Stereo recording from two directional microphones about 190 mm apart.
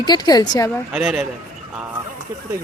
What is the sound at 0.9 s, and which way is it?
Speech, 5° right (ahead or behind).